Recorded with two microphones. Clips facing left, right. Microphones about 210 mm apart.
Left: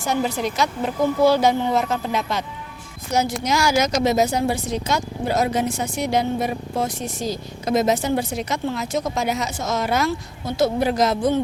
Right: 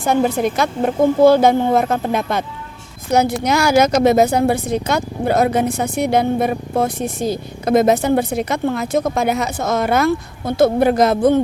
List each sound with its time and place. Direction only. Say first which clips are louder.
0.0 s a woman's voice: right 6 dB; 55° right (ahead or behind)